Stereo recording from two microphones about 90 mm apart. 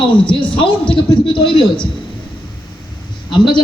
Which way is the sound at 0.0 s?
70° left (ahead or behind).